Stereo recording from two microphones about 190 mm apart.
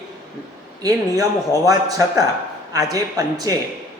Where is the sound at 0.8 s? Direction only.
20° right (ahead or behind).